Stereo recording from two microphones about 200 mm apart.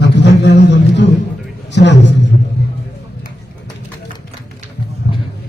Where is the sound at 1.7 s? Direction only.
60° left (ahead or behind).